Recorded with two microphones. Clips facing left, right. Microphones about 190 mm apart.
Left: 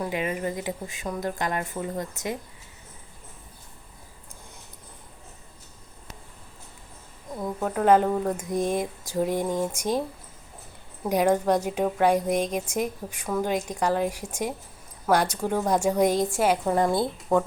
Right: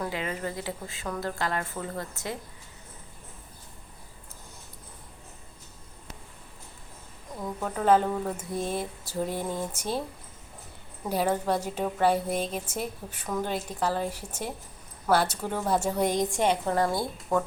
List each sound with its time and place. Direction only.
0.0 s a woman's voice: 15° left (ahead or behind)
7.4 s a woman's voice: 5° left (ahead or behind)
11.0 s a woman's voice: 15° left (ahead or behind)
16.7 s a woman's voice: 20° left (ahead or behind)